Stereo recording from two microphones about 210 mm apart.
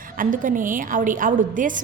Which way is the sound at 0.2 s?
40° right (ahead or behind).